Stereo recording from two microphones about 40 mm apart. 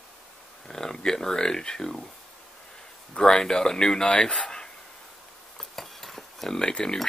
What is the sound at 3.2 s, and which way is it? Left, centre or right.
Speech, centre.